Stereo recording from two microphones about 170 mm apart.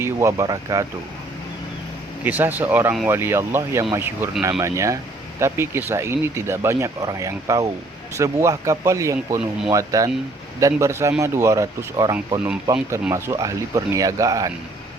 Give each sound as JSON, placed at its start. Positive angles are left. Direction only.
{"t": 0.0, "sound": "speech", "side_deg": -15}
{"t": 2.2, "sound": "speech", "side_deg": -10}